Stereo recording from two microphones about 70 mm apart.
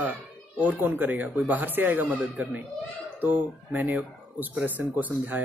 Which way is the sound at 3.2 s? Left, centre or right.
Right.